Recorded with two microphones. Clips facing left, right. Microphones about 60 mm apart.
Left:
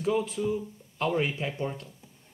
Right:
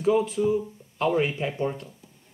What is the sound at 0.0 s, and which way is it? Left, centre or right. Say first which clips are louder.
Speech: right 5 dB; centre.